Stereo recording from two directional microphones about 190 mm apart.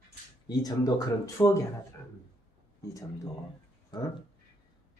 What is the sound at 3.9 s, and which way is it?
Speech, 25° left (ahead or behind).